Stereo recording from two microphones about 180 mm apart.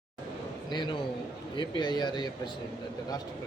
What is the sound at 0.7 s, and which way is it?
Speech, 25° left (ahead or behind).